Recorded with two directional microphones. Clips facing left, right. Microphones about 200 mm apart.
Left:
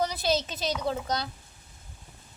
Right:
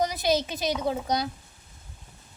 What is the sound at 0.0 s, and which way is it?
A woman's voice, 15° right (ahead or behind).